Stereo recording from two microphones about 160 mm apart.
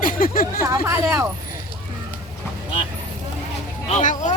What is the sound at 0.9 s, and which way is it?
Speech, 20° right (ahead or behind).